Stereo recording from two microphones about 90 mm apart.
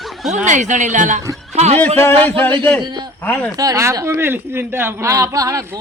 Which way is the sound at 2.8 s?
50° right (ahead or behind).